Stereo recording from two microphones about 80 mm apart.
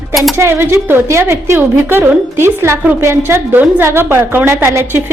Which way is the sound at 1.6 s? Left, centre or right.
Right.